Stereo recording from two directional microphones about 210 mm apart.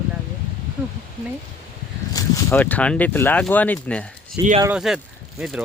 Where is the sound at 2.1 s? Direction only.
15° left (ahead or behind).